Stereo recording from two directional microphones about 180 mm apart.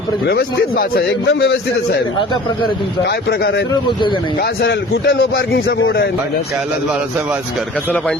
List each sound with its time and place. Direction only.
0.3 s a man's voice: 60° left (ahead or behind)
3.0 s a man's voice: 65° left (ahead or behind)
4.6 s a man's voice: 65° left (ahead or behind)